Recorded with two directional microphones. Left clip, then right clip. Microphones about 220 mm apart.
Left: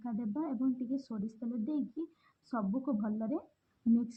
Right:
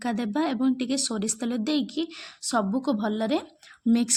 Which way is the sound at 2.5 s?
50° right (ahead or behind).